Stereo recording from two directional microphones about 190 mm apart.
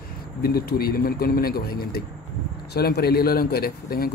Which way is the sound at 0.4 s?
55° left (ahead or behind).